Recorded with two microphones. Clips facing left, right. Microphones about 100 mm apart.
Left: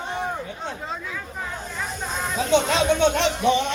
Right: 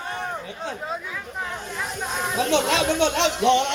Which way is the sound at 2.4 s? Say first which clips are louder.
Left 1 dB; 90° right.